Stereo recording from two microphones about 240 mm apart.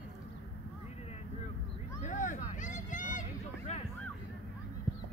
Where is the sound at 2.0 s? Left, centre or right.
Left.